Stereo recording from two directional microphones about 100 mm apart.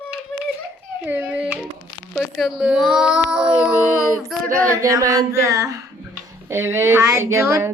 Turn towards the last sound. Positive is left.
turn(degrees=-25)  # may be behind; listen again after turning